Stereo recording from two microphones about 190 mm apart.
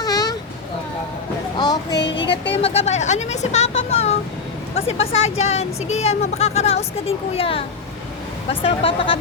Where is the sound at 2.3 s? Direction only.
30° left (ahead or behind).